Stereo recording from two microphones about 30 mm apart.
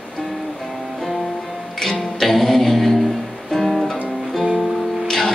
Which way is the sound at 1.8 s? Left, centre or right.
Centre.